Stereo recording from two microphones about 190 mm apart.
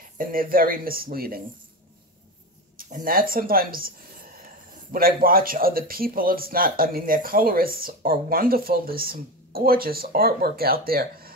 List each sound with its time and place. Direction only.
0.2 s a man's voice: 50° right (ahead or behind)
2.8 s a man's voice: 45° right (ahead or behind)